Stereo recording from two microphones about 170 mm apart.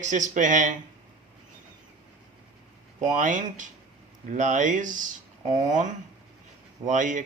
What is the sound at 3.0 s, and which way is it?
Speech, 50° right (ahead or behind).